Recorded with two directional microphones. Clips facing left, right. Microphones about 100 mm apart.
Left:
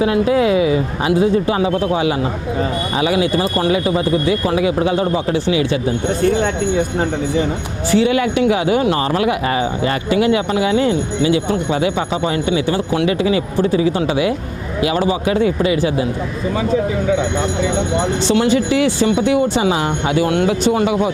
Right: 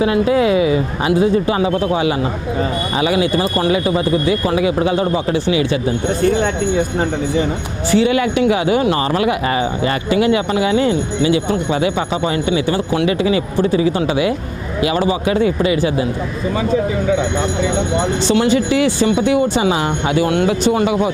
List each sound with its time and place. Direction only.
0.0 s speech: 15° right (ahead or behind)
7.9 s speech: 15° right (ahead or behind)
17.1 s speech: 20° right (ahead or behind)